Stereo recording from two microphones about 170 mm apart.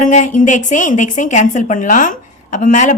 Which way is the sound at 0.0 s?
50° left (ahead or behind).